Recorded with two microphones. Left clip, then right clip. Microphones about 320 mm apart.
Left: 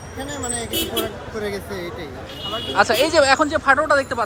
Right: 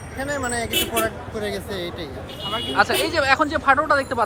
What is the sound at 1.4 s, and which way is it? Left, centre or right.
Speech, centre.